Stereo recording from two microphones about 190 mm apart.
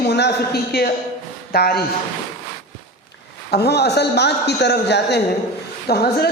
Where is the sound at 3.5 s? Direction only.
60° left (ahead or behind).